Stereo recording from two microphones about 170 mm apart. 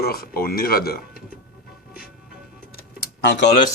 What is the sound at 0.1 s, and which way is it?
Speech, 60° left (ahead or behind).